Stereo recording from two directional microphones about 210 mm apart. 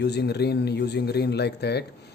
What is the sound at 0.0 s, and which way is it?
Speech, 50° left (ahead or behind).